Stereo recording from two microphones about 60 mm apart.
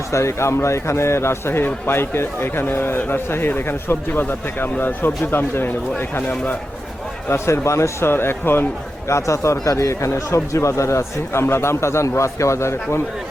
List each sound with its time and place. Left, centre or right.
0.1 s a man's voice: left
7.3 s a man's voice: left
9.0 s speech: left